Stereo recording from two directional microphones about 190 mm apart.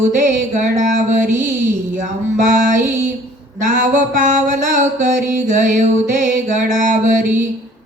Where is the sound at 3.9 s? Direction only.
40° right (ahead or behind).